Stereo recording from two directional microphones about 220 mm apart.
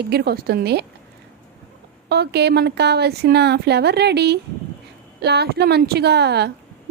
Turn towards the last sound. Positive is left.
turn(degrees=-50)  # may be behind; listen again after turning